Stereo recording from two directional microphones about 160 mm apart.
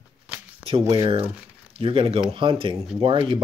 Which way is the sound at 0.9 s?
35° right (ahead or behind).